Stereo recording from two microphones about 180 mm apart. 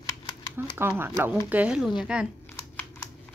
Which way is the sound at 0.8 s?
10° right (ahead or behind).